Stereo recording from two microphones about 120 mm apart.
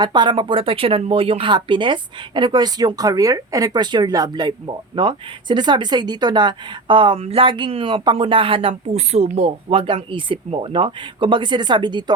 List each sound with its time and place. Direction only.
0.0 s speech: 40° right (ahead or behind)